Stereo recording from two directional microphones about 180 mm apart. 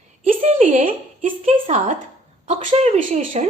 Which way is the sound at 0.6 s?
45° right (ahead or behind).